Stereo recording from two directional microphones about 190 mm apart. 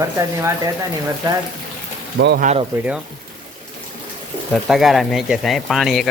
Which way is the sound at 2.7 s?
5° right (ahead or behind).